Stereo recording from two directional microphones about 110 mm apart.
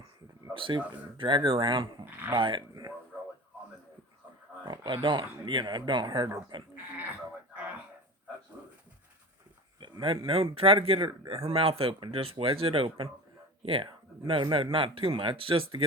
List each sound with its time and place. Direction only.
0.5 s speech: 50° right (ahead or behind)
4.6 s speech: 45° right (ahead or behind)
9.8 s speech: 45° right (ahead or behind)